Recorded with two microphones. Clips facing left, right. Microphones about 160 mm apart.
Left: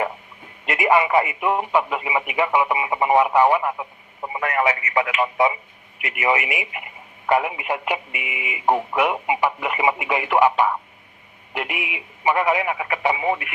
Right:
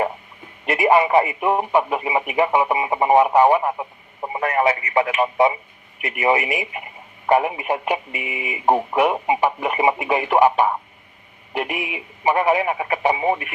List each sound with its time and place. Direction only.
0.6 s speech: 30° right (ahead or behind)
11.5 s speech: 35° right (ahead or behind)